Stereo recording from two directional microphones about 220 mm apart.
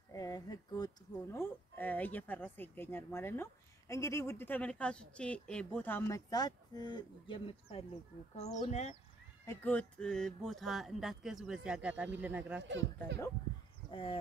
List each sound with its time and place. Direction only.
0.1 s speech: 15° left (ahead or behind)
9.5 s speech: 10° left (ahead or behind)
12.6 s speech: 55° right (ahead or behind)
13.8 s speech: 25° left (ahead or behind)